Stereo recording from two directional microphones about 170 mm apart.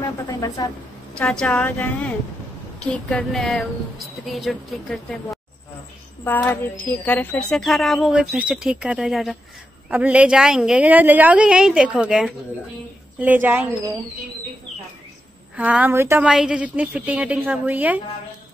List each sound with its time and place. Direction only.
0.3 s speech: 20° left (ahead or behind)
1.1 s a woman's voice: 5° left (ahead or behind)
2.8 s music: 5° left (ahead or behind)
6.2 s music: 10° left (ahead or behind); by 12.4 s 5° right (ahead or behind)
13.2 s a woman's voice: 10° right (ahead or behind)
15.5 s a woman's voice: 10° right (ahead or behind)